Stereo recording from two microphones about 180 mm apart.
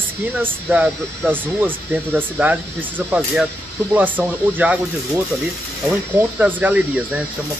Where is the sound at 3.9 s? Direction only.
10° right (ahead or behind).